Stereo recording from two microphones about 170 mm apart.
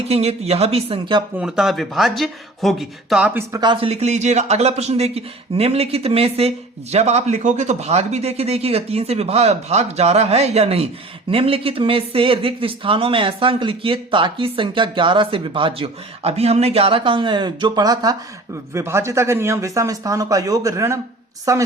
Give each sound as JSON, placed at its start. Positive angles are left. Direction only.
{"t": 0.1, "sound": "speech", "side_deg": -35}
{"t": 1.4, "sound": "speech", "side_deg": -5}
{"t": 3.5, "sound": "a woman's voice", "side_deg": -25}